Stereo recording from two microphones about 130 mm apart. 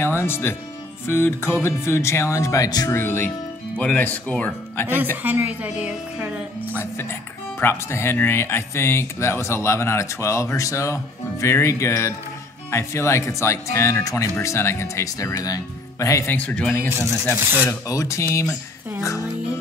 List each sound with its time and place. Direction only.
0.0 s speech: 15° left (ahead or behind)
5.1 s speech: 15° right (ahead or behind)
6.7 s speech: 20° left (ahead or behind)
16.3 s speech: 10° left (ahead or behind)
16.9 s speech: 25° right (ahead or behind)
17.6 s speech: 25° left (ahead or behind)